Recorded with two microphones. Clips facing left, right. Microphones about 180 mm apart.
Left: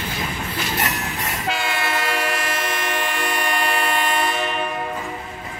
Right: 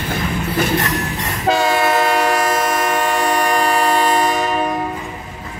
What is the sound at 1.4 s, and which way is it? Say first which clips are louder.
Train: right 11 dB; 40° right (ahead or behind).